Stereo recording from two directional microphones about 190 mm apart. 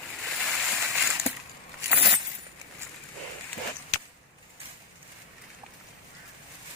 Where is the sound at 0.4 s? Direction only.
Centre (ahead or behind).